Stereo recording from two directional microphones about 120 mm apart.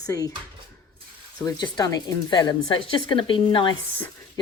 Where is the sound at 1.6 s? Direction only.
35° left (ahead or behind).